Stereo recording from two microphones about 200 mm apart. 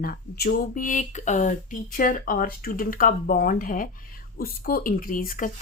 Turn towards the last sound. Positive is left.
turn(degrees=45)  # may be behind; listen again after turning